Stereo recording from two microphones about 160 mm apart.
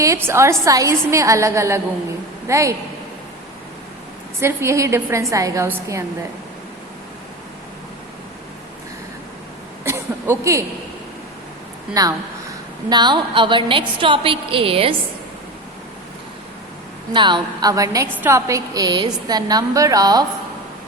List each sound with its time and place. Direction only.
0.0 s a woman's voice: 15° right (ahead or behind)
4.4 s a woman's voice: 15° right (ahead or behind)
9.8 s a sound: 15° right (ahead or behind)
12.0 s a woman's voice: 20° right (ahead or behind)
17.1 s a woman's voice: 30° right (ahead or behind)